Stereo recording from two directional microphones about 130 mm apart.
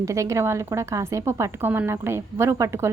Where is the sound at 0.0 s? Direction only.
25° right (ahead or behind).